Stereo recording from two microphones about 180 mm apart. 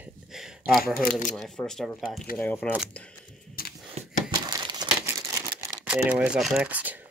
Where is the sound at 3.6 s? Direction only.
55° left (ahead or behind).